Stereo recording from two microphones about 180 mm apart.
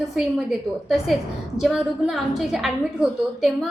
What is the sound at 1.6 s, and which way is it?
A woman's voice, centre (ahead or behind).